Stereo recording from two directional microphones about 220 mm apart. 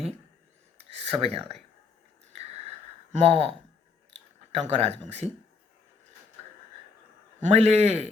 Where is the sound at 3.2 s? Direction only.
25° right (ahead or behind).